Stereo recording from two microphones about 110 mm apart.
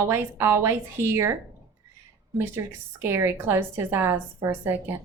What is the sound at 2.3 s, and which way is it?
A woman's voice, 20° right (ahead or behind).